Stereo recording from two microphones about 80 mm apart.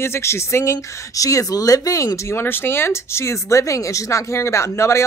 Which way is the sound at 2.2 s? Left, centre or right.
Left.